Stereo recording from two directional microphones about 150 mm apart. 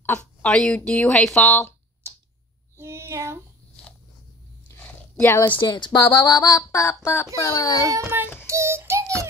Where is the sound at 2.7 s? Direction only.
15° right (ahead or behind).